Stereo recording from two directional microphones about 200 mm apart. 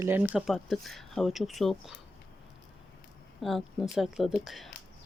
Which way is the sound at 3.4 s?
Centre (ahead or behind).